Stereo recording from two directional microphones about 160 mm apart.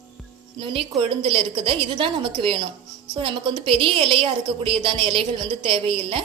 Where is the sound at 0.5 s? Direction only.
35° right (ahead or behind).